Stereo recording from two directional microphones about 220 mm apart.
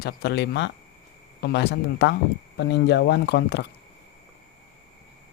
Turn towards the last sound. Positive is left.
turn(degrees=50)  # may be behind; listen again after turning